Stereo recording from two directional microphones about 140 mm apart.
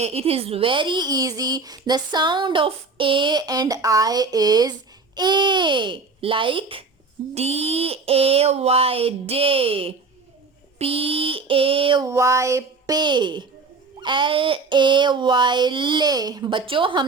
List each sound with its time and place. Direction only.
0.0 s a woman's voice: 45° right (ahead or behind); by 4.7 s 30° right (ahead or behind)
5.1 s child singing: 30° right (ahead or behind)
7.3 s a sound: 50° right (ahead or behind)
10.8 s child singing: 45° right (ahead or behind)
12.0 s a woman's voice: 20° right (ahead or behind)
14.0 s child singing: 35° right (ahead or behind)